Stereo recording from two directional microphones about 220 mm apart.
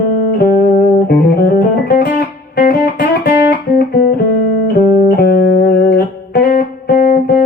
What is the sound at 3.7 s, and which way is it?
Music, 45° left (ahead or behind).